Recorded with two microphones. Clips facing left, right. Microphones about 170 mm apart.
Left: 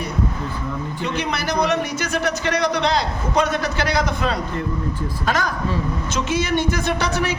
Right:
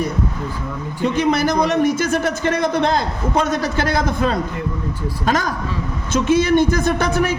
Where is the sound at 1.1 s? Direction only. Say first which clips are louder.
Right 6 dB; 50° right (ahead or behind).